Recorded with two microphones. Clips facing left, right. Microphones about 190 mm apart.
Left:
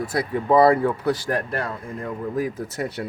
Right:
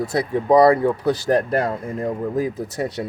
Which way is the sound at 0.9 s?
25° right (ahead or behind).